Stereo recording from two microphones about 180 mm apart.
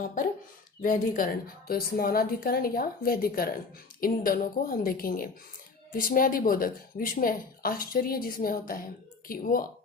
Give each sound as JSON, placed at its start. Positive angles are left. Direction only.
{"t": 0.0, "sound": "a woman's voice", "side_deg": 50}